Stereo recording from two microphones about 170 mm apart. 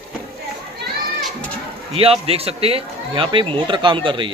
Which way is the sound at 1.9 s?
35° right (ahead or behind).